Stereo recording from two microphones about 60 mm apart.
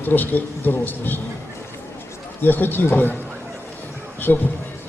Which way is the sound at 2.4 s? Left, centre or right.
Left.